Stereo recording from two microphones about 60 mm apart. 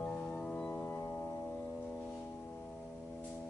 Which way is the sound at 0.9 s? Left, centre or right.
Left.